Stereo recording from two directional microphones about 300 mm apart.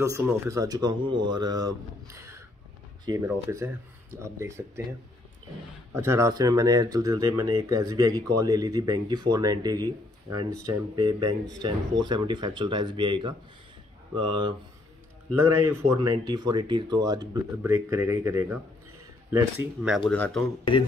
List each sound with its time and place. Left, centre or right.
0.0 s speech: centre
5.9 s speech: centre
15.9 s speech: centre